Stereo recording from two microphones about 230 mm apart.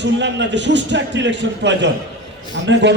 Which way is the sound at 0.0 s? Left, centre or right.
Right.